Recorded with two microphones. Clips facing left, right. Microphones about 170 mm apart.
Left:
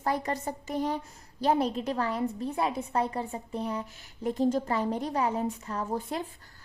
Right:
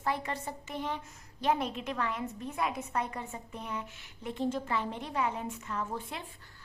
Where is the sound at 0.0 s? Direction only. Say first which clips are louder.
Left 4 dB; 40° left (ahead or behind).